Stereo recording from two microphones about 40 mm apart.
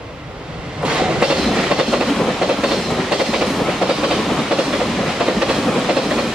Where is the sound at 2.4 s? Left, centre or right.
Centre.